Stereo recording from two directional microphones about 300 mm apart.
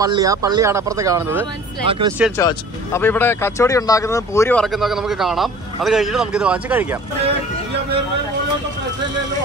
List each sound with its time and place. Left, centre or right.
0.0 s speech: centre
2.3 s speech: centre